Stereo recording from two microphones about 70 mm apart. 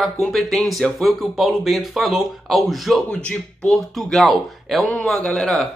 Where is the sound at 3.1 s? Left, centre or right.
Centre.